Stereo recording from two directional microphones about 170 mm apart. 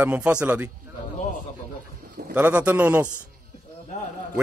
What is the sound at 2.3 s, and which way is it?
Speech, 10° right (ahead or behind).